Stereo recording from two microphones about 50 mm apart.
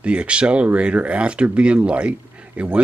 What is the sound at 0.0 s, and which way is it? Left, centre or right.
Speech, right.